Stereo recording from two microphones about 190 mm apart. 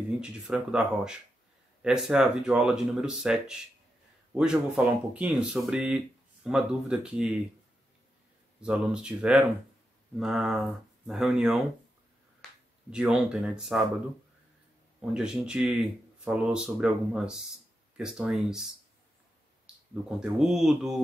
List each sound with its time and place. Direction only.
0.2 s speech: 5° right (ahead or behind)
8.5 s speech: 5° right (ahead or behind)
12.4 s finger snapping: 5° left (ahead or behind)
12.9 s speech: 5° right (ahead or behind)
15.0 s speech: 5° right (ahead or behind)